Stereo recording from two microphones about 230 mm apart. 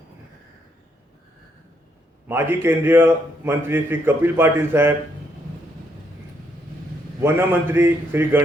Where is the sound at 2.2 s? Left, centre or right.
Centre.